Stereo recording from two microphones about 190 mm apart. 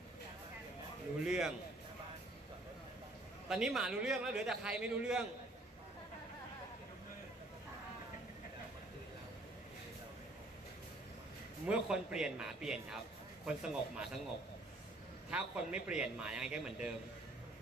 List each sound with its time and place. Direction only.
1.2 s a man's voice: 5° right (ahead or behind)
3.4 s a man's voice: 5° right (ahead or behind)
11.6 s a man's voice: 5° right (ahead or behind)
15.3 s a man's voice: 5° right (ahead or behind)